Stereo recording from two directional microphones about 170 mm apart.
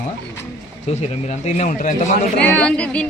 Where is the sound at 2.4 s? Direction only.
10° left (ahead or behind).